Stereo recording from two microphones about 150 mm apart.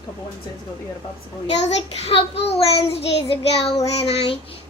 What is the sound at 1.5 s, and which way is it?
A child's voice, 45° left (ahead or behind).